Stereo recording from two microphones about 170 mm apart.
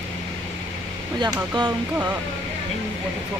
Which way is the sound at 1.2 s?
25° right (ahead or behind).